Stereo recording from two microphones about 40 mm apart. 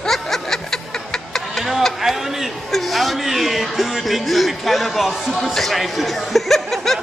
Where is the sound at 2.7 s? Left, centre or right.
Centre.